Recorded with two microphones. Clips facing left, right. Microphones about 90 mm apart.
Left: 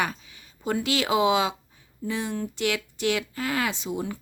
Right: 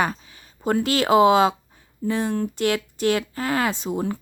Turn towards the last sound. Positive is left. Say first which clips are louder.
# right 5 dB
turn(degrees=-45)  # may be behind; listen again after turning